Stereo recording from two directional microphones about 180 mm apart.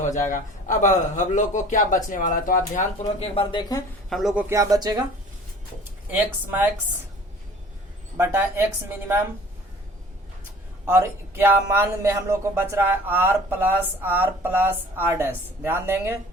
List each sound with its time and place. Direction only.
0.0 s a man's voice: 45° left (ahead or behind)
3.2 s speech: 30° left (ahead or behind)
4.1 s a man's voice: centre (ahead or behind)
4.4 s speech: 20° right (ahead or behind)
6.1 s speech: 10° right (ahead or behind)
8.2 s speech: 10° right (ahead or behind)
10.8 s speech: 15° right (ahead or behind)